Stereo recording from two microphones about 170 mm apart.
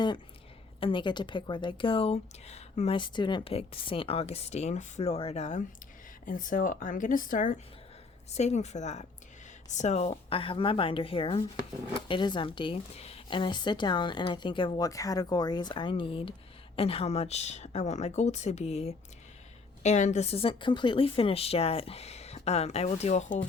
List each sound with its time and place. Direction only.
0.8 s a woman's voice: 30° left (ahead or behind)